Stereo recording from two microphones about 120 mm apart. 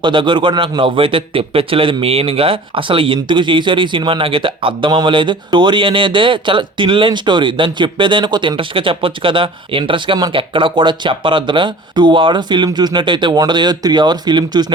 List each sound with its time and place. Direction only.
0.0 s a man's voice: 45° right (ahead or behind)